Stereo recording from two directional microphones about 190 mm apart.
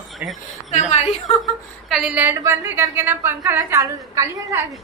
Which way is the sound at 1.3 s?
Centre (ahead or behind).